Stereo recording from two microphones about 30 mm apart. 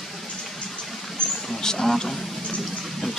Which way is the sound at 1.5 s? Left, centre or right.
Centre.